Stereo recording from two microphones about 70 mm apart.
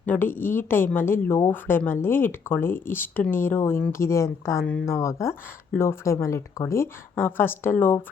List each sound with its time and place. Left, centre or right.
0.0 s a woman's voice: left